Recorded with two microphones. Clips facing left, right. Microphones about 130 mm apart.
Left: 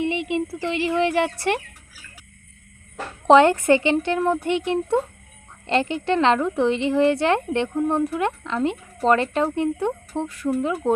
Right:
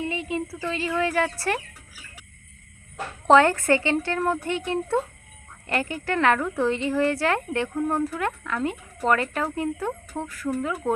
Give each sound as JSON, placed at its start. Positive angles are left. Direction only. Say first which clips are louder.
{"t": 0.0, "sound": "speech", "louder": "left 5 dB", "side_deg": 20}
{"t": 3.2, "sound": "speech", "louder": "left 3 dB", "side_deg": 20}